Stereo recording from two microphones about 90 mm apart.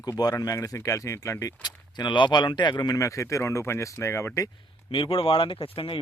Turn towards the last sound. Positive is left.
turn(degrees=90)